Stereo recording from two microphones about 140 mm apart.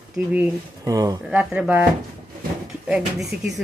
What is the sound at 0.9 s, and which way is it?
Speech, 25° right (ahead or behind).